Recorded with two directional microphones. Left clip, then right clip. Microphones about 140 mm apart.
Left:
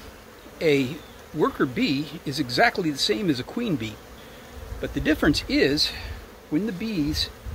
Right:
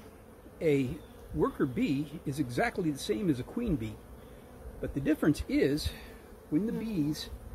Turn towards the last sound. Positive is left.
turn(degrees=0)  # may be behind; listen again after turning